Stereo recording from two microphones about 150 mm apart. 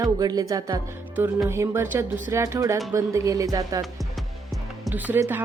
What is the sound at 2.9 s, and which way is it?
Music, 20° right (ahead or behind).